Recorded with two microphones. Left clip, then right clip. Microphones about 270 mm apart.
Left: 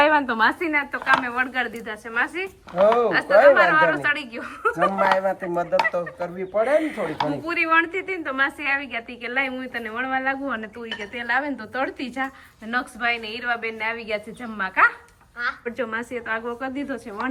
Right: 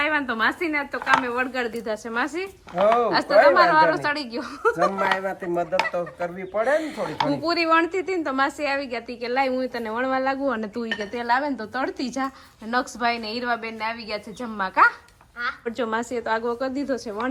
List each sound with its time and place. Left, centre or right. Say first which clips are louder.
0.1 s a woman's voice: left 4 dB; centre
2.7 s speech: left 1 dB; centre
3.9 s a woman's voice: left 2 dB; centre
4.7 s a woman's voice: left 3 dB; centre